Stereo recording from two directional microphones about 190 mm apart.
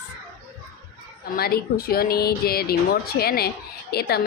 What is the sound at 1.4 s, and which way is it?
A woman's voice, 55° left (ahead or behind).